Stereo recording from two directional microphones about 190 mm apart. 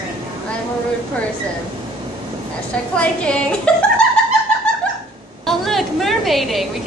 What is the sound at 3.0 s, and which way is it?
A woman's voice, 5° left (ahead or behind).